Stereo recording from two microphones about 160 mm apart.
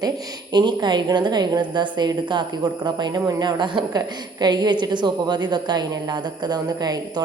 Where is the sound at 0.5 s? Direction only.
25° right (ahead or behind).